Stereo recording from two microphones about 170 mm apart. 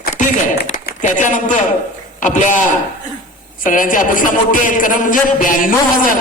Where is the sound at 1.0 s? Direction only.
50° left (ahead or behind).